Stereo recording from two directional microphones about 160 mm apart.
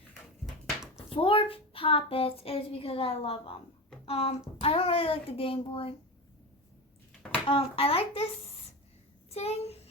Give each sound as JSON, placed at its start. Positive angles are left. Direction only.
{"t": 1.1, "sound": "a woman's voice", "side_deg": 35}
{"t": 7.1, "sound": "a sound", "side_deg": 5}
{"t": 7.4, "sound": "a woman's voice", "side_deg": 35}
{"t": 9.3, "sound": "a woman's voice", "side_deg": 40}